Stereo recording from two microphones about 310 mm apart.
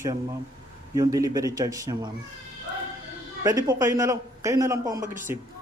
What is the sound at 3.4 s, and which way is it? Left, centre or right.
Speech, centre.